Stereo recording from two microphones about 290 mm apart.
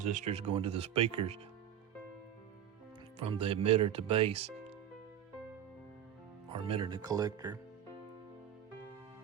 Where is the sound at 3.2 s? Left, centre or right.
Right.